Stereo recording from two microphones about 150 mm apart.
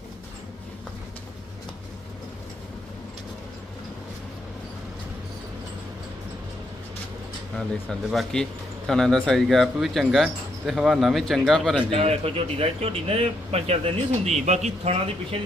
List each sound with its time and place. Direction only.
7.5 s speech: centre (ahead or behind)
11.8 s speech: 40° right (ahead or behind)